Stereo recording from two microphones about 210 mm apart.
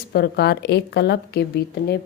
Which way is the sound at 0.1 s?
50° left (ahead or behind).